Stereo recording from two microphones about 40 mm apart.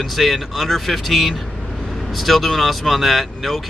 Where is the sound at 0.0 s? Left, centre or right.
Centre.